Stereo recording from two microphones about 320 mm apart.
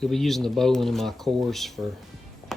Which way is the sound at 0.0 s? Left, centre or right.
Centre.